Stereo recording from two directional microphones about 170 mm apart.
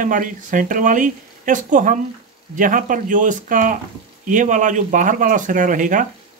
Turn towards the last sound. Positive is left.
turn(degrees=-50)  # may be behind; listen again after turning